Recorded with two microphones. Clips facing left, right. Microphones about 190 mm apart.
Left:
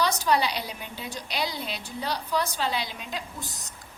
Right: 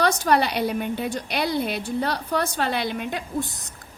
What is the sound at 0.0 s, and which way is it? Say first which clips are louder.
A woman's voice: right 4 dB; 55° right (ahead or behind).